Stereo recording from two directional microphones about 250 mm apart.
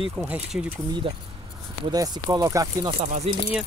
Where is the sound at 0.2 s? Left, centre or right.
Centre.